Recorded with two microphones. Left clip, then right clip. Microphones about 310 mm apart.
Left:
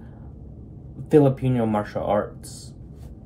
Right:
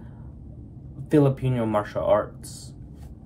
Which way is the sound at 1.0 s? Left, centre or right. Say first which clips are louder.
Left 4 dB; centre.